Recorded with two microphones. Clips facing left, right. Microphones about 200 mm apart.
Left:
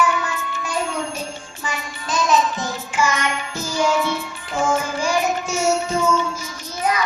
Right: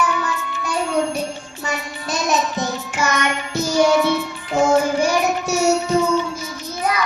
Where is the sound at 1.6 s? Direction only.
65° right (ahead or behind).